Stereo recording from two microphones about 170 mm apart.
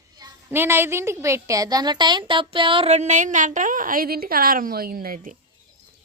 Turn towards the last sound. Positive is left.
turn(degrees=-55)  # may be behind; listen again after turning